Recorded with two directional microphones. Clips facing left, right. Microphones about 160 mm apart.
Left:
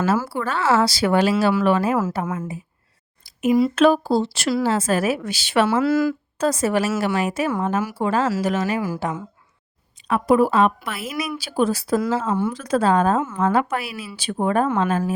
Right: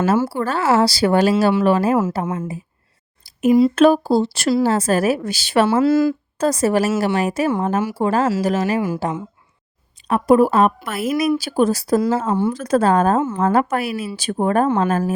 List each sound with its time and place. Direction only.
0.2 s a woman's voice: 35° right (ahead or behind)
6.4 s a woman's voice: 40° right (ahead or behind)
10.1 s a woman's voice: 40° right (ahead or behind)
12.5 s speech: 45° right (ahead or behind)
13.1 s a woman's voice: 30° right (ahead or behind)
13.5 s speech: 45° right (ahead or behind)